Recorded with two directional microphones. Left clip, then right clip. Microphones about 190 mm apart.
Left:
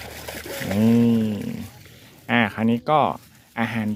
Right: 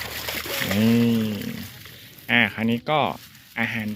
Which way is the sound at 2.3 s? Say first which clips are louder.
Right 1 dB; 10° left (ahead or behind).